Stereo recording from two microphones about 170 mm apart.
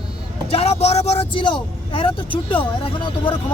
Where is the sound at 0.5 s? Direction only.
35° left (ahead or behind).